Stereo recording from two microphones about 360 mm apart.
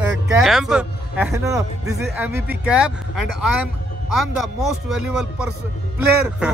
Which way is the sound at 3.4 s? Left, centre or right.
Left.